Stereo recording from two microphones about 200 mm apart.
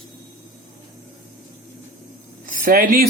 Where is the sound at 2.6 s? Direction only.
45° right (ahead or behind).